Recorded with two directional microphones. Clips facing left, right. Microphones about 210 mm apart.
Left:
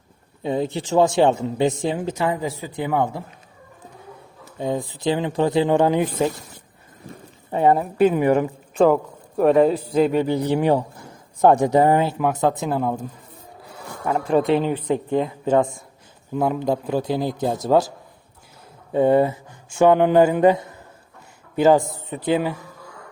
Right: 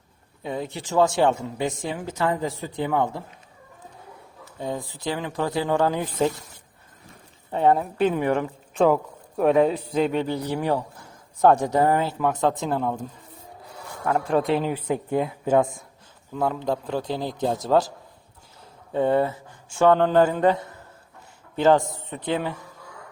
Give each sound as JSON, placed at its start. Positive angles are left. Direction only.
{"t": 0.4, "sound": "speech", "side_deg": 25}
{"t": 4.5, "sound": "speech", "side_deg": 20}
{"t": 7.5, "sound": "a man's voice", "side_deg": 5}
{"t": 10.2, "sound": "a man's voice", "side_deg": 20}
{"t": 16.3, "sound": "speech", "side_deg": 15}
{"t": 18.9, "sound": "a man's voice", "side_deg": 15}